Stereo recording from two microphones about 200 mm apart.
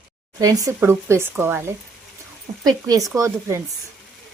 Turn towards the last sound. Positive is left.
turn(degrees=-15)  # may be behind; listen again after turning